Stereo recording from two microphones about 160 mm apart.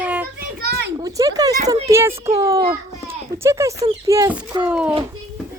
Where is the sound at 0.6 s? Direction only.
90° right.